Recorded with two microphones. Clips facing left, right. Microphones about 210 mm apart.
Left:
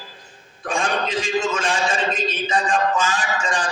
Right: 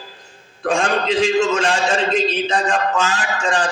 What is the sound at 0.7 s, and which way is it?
A man's voice, 70° right (ahead or behind).